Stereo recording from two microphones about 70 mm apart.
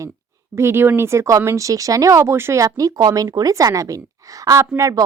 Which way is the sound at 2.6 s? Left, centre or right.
Right.